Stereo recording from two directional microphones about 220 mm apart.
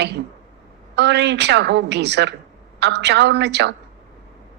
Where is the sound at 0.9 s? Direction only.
50° right (ahead or behind).